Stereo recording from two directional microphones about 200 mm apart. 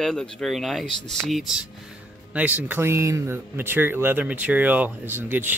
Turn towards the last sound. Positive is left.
turn(degrees=-10)  # may be behind; listen again after turning